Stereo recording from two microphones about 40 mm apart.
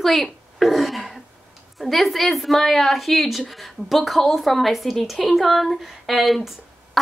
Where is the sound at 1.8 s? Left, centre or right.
Centre.